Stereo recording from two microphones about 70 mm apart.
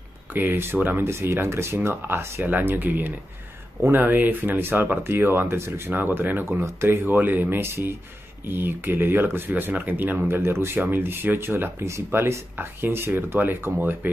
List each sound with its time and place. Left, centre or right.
0.3 s speech: right